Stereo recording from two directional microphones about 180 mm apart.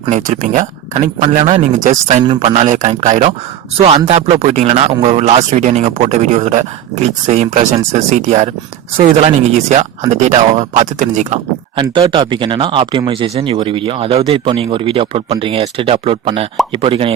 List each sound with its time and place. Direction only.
0.1 s speech: 45° right (ahead or behind)
2.2 s speech: 30° right (ahead or behind)
11.8 s speech: 25° right (ahead or behind)